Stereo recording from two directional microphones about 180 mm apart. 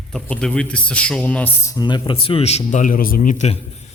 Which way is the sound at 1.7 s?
25° left (ahead or behind).